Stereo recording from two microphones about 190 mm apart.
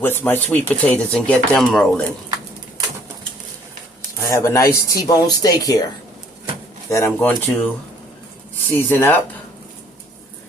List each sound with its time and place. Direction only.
0.0 s speech: 10° left (ahead or behind)
4.3 s speech: 15° left (ahead or behind)
6.9 s speech: 10° left (ahead or behind)
8.7 s speech: 10° left (ahead or behind)